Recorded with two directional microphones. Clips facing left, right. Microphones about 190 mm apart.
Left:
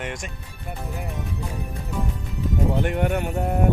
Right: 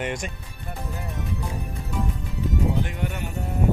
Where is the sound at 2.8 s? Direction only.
60° left (ahead or behind).